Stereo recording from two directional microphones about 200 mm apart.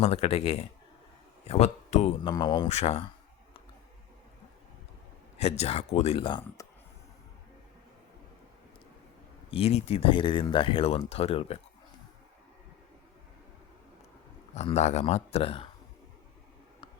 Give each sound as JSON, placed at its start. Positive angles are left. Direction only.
{"t": 0.0, "sound": "speech", "side_deg": 30}
{"t": 2.2, "sound": "speech", "side_deg": 20}
{"t": 5.4, "sound": "speech", "side_deg": 30}
{"t": 9.5, "sound": "speech", "side_deg": 30}
{"t": 14.5, "sound": "speech", "side_deg": 35}